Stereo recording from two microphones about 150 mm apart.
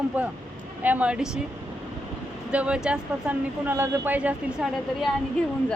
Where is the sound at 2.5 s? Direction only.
5° right (ahead or behind).